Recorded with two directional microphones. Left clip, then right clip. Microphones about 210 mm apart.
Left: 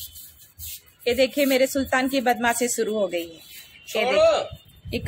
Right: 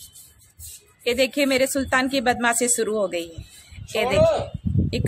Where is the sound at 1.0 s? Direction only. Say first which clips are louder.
Even; centre (ahead or behind).